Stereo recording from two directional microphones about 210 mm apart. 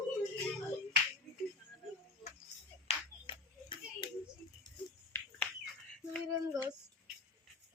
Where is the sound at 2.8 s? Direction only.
25° left (ahead or behind).